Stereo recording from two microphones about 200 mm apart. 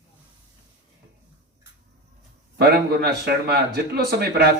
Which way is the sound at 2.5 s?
50° right (ahead or behind).